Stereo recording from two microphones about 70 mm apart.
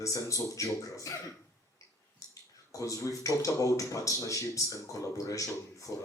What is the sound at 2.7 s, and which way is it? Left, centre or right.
Speech, left.